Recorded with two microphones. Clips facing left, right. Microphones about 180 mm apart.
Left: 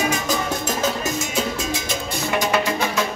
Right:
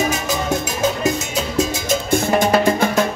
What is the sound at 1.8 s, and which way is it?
Music, 50° right (ahead or behind).